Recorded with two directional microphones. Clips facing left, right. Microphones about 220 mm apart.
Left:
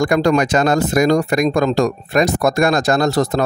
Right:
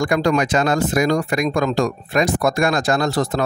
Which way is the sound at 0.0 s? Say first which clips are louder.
Left 3 dB; 40° left (ahead or behind).